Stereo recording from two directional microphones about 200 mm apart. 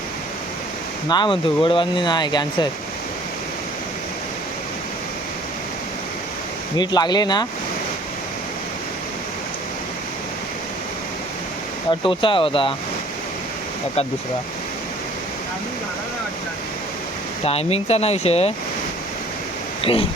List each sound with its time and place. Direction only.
1.0 s speech: 20° left (ahead or behind)
6.7 s speech: 20° left (ahead or behind)
11.9 s speech: 25° left (ahead or behind)
17.4 s speech: 30° left (ahead or behind)
19.8 s speech: 25° left (ahead or behind)